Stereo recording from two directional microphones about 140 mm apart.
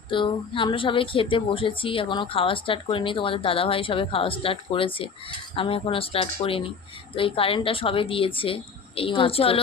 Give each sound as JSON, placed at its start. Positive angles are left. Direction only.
{"t": 0.1, "sound": "speech", "side_deg": 35}